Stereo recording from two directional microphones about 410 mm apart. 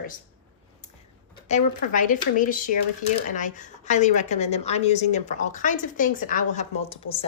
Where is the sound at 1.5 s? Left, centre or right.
Centre.